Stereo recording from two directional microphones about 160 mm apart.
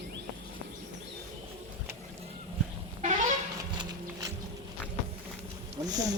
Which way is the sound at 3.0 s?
50° right (ahead or behind).